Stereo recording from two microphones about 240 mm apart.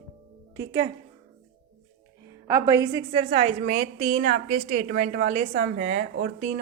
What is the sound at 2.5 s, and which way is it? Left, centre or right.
A woman's voice, centre.